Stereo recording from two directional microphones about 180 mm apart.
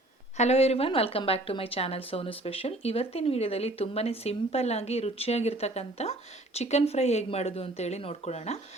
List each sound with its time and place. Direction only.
0.3 s a woman's voice: 35° left (ahead or behind)